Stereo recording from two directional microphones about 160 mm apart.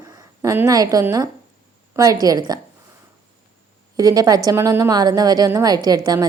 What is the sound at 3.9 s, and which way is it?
Speech, 20° right (ahead or behind).